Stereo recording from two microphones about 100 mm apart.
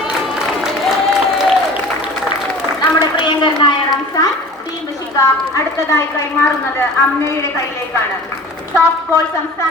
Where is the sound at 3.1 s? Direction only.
50° left (ahead or behind).